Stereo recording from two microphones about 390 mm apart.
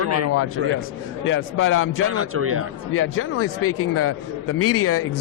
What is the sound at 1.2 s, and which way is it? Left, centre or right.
Speech, left.